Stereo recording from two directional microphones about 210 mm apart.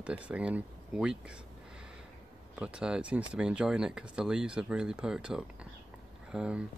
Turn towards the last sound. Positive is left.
turn(degrees=-5)  # may be behind; listen again after turning